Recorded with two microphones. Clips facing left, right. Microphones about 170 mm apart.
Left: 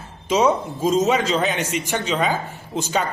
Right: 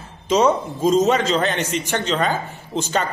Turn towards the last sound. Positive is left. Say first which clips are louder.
# right 1 dB
turn(degrees=5)  # may be behind; listen again after turning